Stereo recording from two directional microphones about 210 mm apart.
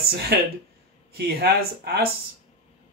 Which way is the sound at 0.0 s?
50° right (ahead or behind).